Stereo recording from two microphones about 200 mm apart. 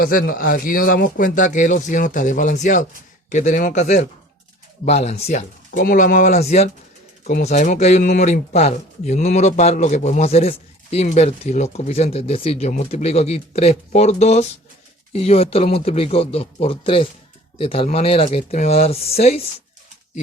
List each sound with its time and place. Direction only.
0.0 s speech: 45° left (ahead or behind)